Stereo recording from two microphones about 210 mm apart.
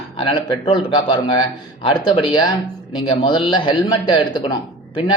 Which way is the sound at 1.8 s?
25° left (ahead or behind).